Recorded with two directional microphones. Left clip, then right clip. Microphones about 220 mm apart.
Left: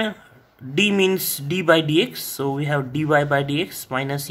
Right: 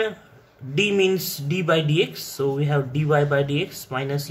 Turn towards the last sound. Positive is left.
turn(degrees=40)  # may be behind; listen again after turning